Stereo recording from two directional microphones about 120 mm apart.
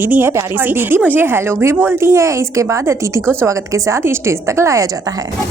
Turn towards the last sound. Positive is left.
turn(degrees=-25)  # may be behind; listen again after turning